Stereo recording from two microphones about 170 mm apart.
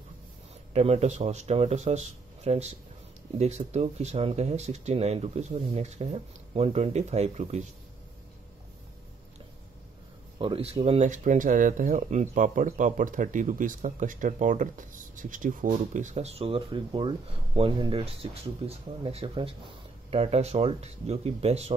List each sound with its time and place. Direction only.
0.7 s speech: 40° right (ahead or behind)
10.4 s speech: 35° right (ahead or behind)